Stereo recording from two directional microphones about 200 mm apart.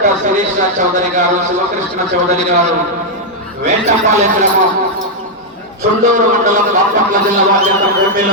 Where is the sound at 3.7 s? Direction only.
35° right (ahead or behind).